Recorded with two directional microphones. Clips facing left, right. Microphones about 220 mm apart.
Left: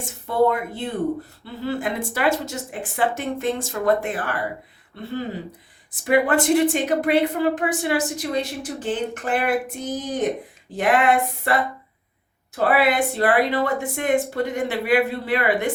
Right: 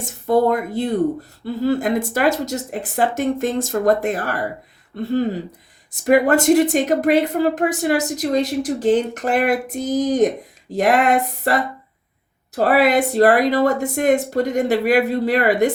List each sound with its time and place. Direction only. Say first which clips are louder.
0.0 s a woman's voice: right 3 dB; 40° right (ahead or behind)
12.5 s a woman's voice: right 4 dB; 40° right (ahead or behind)